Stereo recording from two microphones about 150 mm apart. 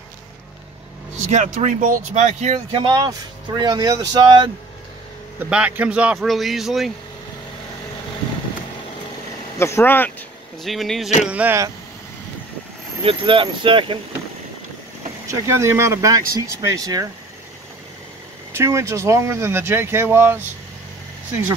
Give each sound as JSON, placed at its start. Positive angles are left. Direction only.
{"t": 1.2, "sound": "speech", "side_deg": -55}
{"t": 2.7, "sound": "speech", "side_deg": -30}
{"t": 5.4, "sound": "speech", "side_deg": -10}
{"t": 9.6, "sound": "speech", "side_deg": 15}
{"t": 10.6, "sound": "speech", "side_deg": 0}
{"t": 13.0, "sound": "speech", "side_deg": -35}
{"t": 15.4, "sound": "speech", "side_deg": -20}
{"t": 18.5, "sound": "speech", "side_deg": -20}